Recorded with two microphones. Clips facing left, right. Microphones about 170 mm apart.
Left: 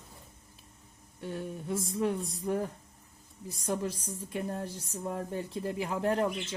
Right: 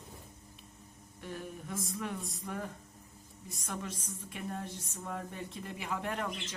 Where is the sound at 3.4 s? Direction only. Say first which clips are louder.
Left 8 dB; 35° left (ahead or behind).